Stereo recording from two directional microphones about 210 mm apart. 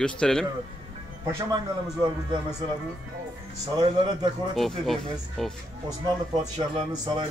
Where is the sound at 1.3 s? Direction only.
20° right (ahead or behind).